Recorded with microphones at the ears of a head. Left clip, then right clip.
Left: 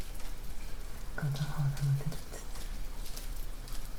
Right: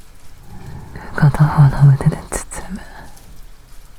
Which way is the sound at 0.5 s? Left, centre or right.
Right.